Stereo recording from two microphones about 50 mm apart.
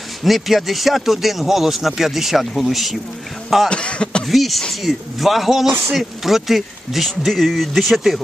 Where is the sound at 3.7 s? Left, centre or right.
Left.